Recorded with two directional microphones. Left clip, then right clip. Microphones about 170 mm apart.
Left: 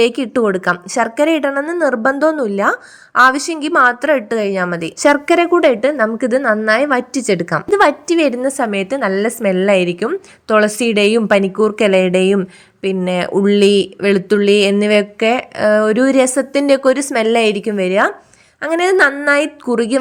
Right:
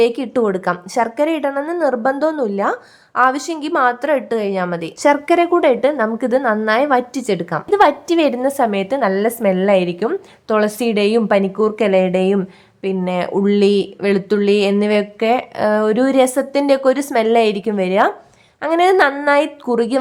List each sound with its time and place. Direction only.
0.0 s a woman's voice: 20° left (ahead or behind)
7.8 s a woman's voice: 10° left (ahead or behind)